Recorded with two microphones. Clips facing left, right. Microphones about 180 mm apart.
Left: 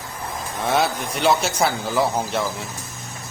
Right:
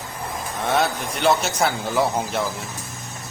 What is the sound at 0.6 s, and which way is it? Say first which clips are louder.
A man's voice: left 1 dB; centre (ahead or behind).